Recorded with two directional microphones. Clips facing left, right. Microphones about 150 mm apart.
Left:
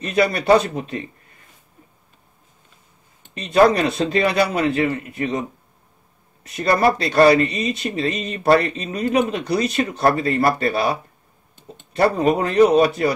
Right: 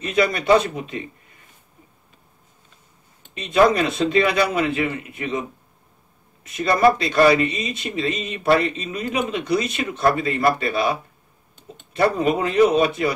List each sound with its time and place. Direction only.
0.0 s speech: 35° left (ahead or behind)
3.3 s speech: 35° left (ahead or behind)
6.4 s speech: 35° left (ahead or behind)